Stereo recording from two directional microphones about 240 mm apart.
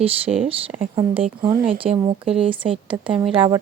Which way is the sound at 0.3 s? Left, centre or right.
Right.